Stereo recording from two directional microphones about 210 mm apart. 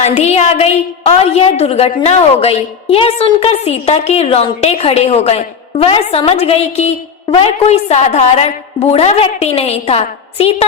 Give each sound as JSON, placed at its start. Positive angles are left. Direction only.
{"t": 0.0, "sound": "a woman's voice", "side_deg": 35}